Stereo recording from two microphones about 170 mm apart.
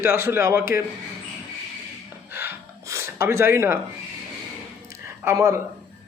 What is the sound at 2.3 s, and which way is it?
Gasp, 15° right (ahead or behind).